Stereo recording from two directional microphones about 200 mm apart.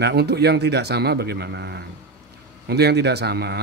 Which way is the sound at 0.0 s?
55° right (ahead or behind).